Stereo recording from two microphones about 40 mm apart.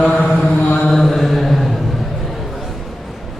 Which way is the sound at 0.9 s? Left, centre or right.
Centre.